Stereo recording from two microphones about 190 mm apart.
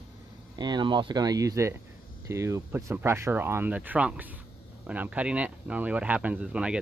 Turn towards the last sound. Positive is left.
turn(degrees=-5)  # may be behind; listen again after turning